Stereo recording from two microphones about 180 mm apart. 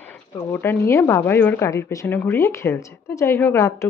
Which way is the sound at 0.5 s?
10° left (ahead or behind).